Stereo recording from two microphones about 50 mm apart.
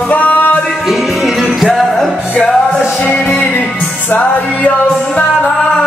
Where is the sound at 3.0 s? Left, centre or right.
Left.